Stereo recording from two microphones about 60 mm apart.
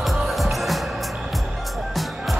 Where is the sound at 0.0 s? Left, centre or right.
Centre.